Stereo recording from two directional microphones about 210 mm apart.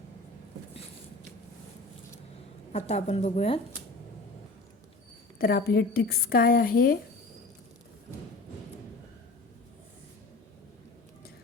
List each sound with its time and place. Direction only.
2.7 s speech: 30° left (ahead or behind)
5.4 s a woman's voice: 45° left (ahead or behind)